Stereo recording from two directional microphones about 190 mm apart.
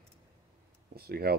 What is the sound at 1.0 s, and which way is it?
Speech, 55° right (ahead or behind).